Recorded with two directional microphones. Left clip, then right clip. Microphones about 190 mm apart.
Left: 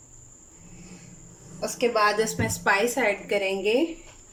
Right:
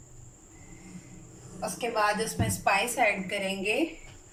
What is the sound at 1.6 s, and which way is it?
A woman's voice, 50° left (ahead or behind).